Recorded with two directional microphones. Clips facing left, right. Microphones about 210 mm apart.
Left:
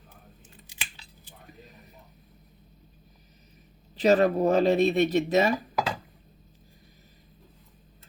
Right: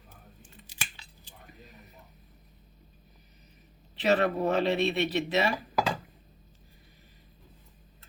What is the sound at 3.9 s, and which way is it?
Speech, 40° left (ahead or behind).